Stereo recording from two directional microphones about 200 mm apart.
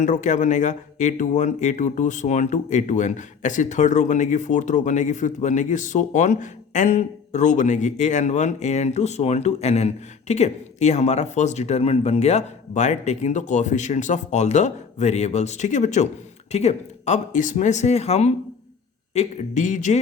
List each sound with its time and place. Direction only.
0.0 s speech: 40° left (ahead or behind)